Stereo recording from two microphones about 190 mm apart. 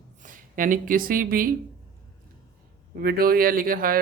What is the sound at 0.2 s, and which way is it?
Speech, 45° right (ahead or behind).